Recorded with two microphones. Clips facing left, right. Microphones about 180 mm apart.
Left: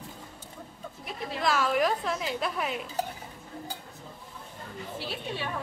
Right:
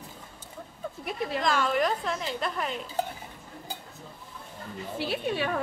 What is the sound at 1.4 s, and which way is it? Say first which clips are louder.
A woman's voice: left 1 dB; 5° left (ahead or behind).